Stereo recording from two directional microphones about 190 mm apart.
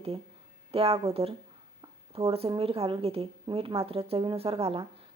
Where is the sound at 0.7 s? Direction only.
30° right (ahead or behind).